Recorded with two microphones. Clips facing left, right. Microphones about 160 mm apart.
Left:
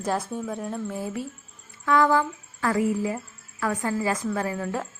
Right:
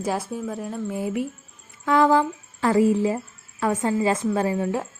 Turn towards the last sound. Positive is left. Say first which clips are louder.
# right 5 dB
turn(degrees=-25)  # may be behind; listen again after turning